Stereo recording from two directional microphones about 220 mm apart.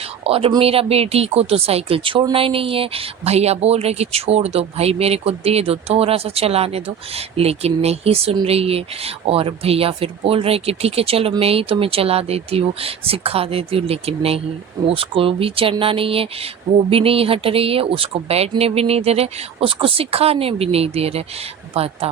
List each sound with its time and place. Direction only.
0.3 s speech: 25° right (ahead or behind)